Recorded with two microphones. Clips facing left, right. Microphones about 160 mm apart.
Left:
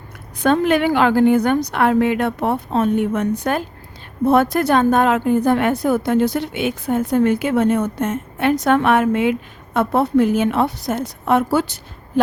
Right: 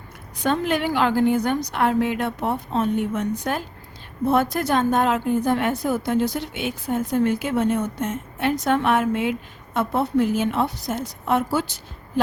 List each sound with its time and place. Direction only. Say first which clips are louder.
0.4 s a woman's voice: left 6 dB; 60° left (ahead or behind)